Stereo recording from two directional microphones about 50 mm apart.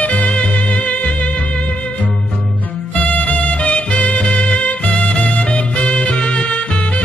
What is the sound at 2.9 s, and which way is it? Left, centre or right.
Music, left.